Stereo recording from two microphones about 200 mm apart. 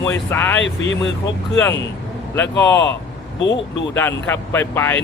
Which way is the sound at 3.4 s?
65° left (ahead or behind).